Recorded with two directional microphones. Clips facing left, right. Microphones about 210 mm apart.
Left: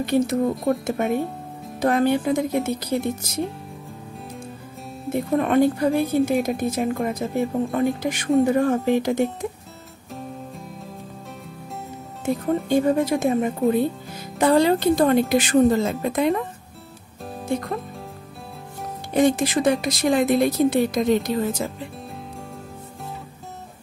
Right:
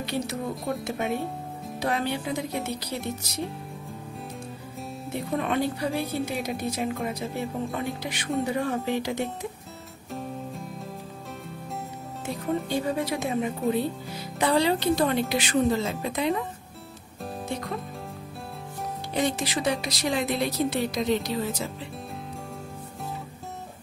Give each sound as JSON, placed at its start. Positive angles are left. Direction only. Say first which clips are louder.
{"t": 0.0, "sound": "a woman's voice", "louder": "left 10 dB", "side_deg": 50}
{"t": 5.1, "sound": "a woman's voice", "louder": "left 8 dB", "side_deg": 50}
{"t": 12.6, "sound": "a woman's voice", "louder": "left 8 dB", "side_deg": 50}
{"t": 17.5, "sound": "speech", "louder": "left 8 dB", "side_deg": 50}
{"t": 19.1, "sound": "a woman's voice", "louder": "left 9 dB", "side_deg": 50}